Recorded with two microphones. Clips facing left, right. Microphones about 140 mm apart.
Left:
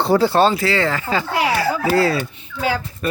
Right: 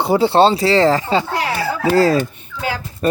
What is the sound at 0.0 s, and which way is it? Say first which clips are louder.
Speech: right 2 dB; 20° right (ahead or behind).